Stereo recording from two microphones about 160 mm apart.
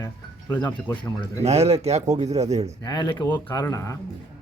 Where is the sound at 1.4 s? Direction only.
40° right (ahead or behind).